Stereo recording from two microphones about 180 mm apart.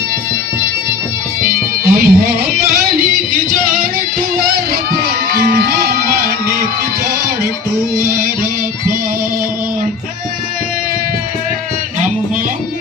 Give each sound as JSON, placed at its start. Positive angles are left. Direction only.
{"t": 1.5, "sound": "music", "side_deg": -55}
{"t": 3.9, "sound": "music", "side_deg": -55}
{"t": 7.9, "sound": "music", "side_deg": -55}